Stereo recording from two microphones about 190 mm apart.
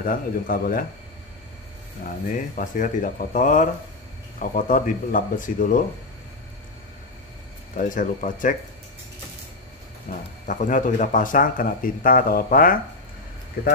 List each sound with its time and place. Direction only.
0.0 s speech: 45° left (ahead or behind)
2.3 s speech: 45° left (ahead or behind)
7.7 s speech: 45° left (ahead or behind)
10.1 s speech: 40° left (ahead or behind)